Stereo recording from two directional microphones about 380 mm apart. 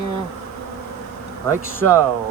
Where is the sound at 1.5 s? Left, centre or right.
Centre.